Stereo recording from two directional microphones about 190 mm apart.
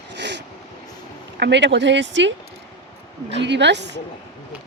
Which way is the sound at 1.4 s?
65° right (ahead or behind).